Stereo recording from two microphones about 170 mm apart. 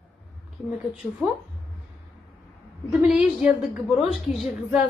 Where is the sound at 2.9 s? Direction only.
5° right (ahead or behind).